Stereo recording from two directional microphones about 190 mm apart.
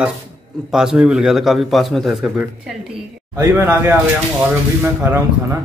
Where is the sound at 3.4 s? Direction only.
10° right (ahead or behind).